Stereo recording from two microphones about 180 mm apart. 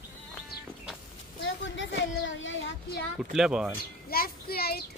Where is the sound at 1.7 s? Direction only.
90° left.